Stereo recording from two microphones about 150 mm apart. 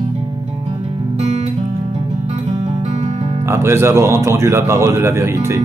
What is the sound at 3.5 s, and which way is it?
A man's voice, 15° right (ahead or behind).